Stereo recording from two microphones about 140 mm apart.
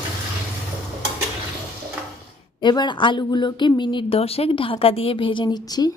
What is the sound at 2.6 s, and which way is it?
Speech, 30° left (ahead or behind).